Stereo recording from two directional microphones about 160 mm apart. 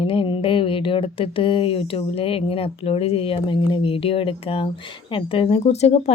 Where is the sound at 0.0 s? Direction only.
35° left (ahead or behind).